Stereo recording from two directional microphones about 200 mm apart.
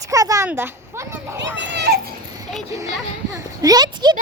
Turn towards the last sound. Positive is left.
turn(degrees=-20)  # may be behind; listen again after turning